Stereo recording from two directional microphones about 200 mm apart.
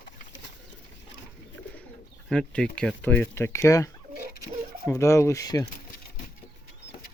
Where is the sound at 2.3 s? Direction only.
5° left (ahead or behind).